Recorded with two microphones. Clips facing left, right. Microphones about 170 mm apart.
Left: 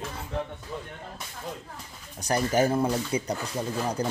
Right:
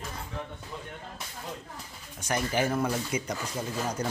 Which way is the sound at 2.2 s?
40° left (ahead or behind).